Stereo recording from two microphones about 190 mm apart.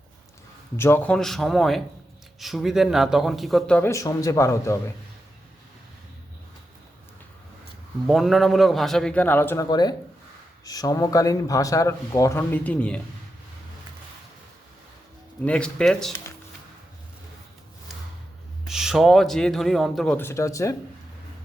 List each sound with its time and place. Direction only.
0.8 s speech: 10° left (ahead or behind)
8.0 s speech: centre (ahead or behind)
9.6 s speech: 20° left (ahead or behind); by 13.0 s 5° left (ahead or behind)
15.4 s speech: 5° left (ahead or behind)
18.7 s speech: centre (ahead or behind); by 20.7 s 15° left (ahead or behind)